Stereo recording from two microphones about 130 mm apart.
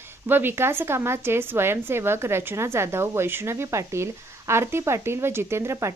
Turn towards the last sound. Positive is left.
turn(degrees=-20)  # may be behind; listen again after turning